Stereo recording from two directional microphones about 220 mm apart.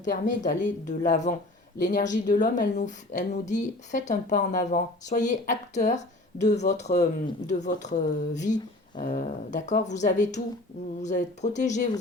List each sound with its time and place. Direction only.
0.1 s a woman's voice: 35° left (ahead or behind)